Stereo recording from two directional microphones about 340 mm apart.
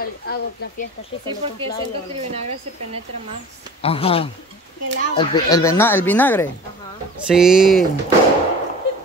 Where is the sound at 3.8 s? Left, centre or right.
Centre.